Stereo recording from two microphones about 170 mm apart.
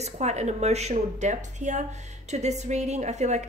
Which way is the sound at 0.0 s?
40° right (ahead or behind).